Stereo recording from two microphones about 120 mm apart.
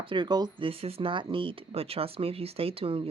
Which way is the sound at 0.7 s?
55° right (ahead or behind).